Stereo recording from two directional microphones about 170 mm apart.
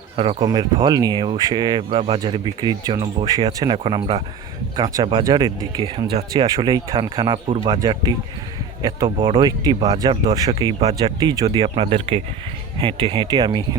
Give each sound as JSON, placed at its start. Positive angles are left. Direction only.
{"t": 0.2, "sound": "speech", "side_deg": -30}
{"t": 5.2, "sound": "speech", "side_deg": -25}